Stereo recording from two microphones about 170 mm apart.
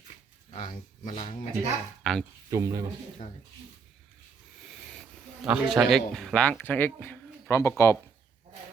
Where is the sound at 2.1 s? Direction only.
5° left (ahead or behind).